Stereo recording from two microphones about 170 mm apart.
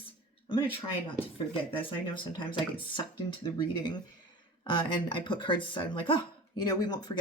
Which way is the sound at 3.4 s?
25° left (ahead or behind).